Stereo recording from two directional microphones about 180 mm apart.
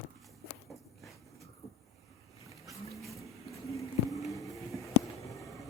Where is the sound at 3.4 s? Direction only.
15° left (ahead or behind).